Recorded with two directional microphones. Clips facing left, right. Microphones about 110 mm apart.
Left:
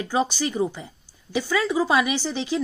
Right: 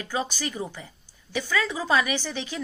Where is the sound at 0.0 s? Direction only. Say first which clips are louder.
Left 6 dB; 20° left (ahead or behind).